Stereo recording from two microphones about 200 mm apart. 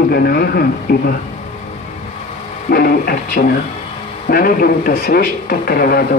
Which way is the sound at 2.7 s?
50° left (ahead or behind).